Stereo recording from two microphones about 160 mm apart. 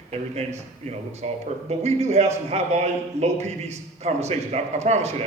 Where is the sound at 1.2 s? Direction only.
45° right (ahead or behind).